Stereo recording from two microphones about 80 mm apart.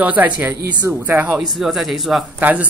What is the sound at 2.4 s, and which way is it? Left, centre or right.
Speech, centre.